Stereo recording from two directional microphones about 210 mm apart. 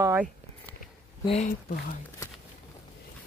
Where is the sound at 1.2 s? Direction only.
30° left (ahead or behind).